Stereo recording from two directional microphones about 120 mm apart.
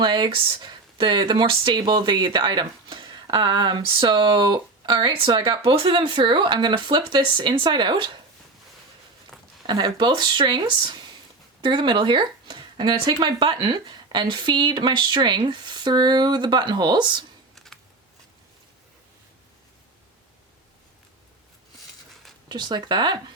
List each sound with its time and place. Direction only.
0.0 s speech: 40° right (ahead or behind)
9.3 s a sound: 5° left (ahead or behind)
9.6 s speech: 35° right (ahead or behind)
17.5 s typing: 5° left (ahead or behind)
22.1 s a sound: centre (ahead or behind)
22.4 s speech: 35° right (ahead or behind)